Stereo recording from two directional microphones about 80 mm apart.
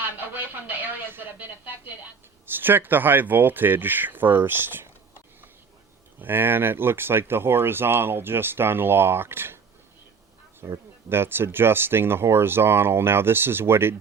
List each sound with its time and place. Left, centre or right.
0.0 s speech: right
6.1 s speech: right
10.6 s speech: right